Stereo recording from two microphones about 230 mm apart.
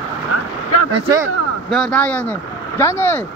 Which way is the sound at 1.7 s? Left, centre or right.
Centre.